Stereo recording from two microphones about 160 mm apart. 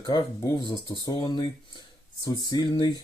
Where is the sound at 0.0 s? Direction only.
25° left (ahead or behind).